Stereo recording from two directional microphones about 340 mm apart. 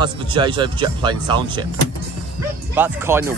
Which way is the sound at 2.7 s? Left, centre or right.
Centre.